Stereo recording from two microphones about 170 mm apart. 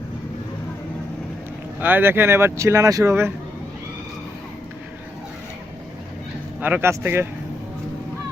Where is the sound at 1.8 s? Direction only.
10° right (ahead or behind).